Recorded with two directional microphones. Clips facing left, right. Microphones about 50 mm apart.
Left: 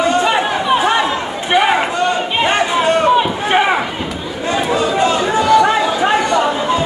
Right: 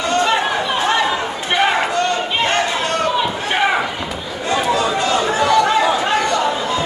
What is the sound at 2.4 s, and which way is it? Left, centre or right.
Run, centre.